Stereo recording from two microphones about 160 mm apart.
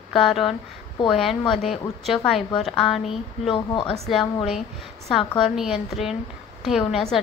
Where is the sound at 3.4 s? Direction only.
35° left (ahead or behind).